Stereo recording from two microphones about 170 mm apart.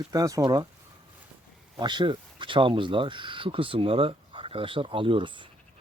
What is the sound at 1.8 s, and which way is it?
Speech, 25° right (ahead or behind).